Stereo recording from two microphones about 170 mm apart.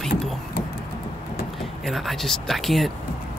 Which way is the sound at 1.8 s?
Centre (ahead or behind).